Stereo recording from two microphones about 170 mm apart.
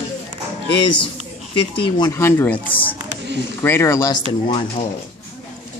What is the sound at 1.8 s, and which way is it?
Speech, 20° left (ahead or behind).